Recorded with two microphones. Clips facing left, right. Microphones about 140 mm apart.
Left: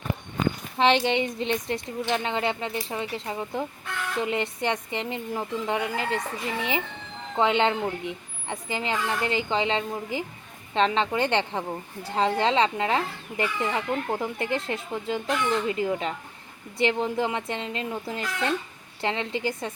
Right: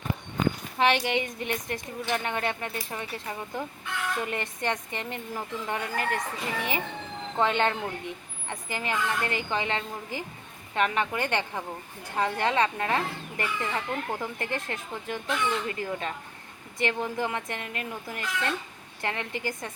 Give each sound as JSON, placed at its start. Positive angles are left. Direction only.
{"t": 0.8, "sound": "speech", "side_deg": 25}